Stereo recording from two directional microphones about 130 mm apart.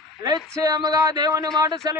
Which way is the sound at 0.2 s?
30° right (ahead or behind).